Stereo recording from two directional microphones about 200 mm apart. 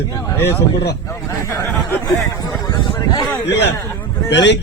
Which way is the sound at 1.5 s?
15° left (ahead or behind).